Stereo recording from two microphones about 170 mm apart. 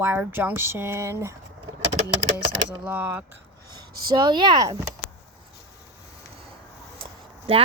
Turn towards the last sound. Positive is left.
turn(degrees=-30)  # may be behind; listen again after turning